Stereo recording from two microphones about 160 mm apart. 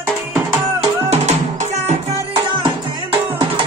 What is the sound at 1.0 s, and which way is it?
Music, 45° right (ahead or behind).